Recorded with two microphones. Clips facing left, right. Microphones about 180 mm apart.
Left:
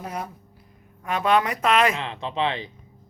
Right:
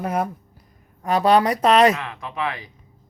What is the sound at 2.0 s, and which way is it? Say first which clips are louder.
Speech: left 2 dB; 25° left (ahead or behind).